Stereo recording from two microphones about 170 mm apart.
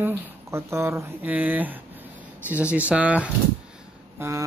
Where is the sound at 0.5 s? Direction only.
15° right (ahead or behind).